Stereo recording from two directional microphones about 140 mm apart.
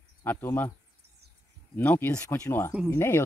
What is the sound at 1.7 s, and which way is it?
Speech, 15° left (ahead or behind).